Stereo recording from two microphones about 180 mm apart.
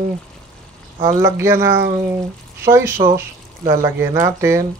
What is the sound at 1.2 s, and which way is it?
Speech, 15° right (ahead or behind).